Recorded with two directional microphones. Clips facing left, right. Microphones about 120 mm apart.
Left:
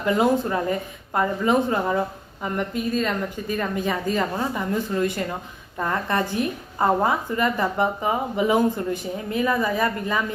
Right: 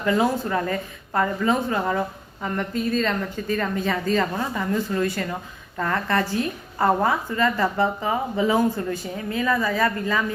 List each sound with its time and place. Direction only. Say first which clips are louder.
0.0 s a woman's voice: left 1 dB; 20° left (ahead or behind)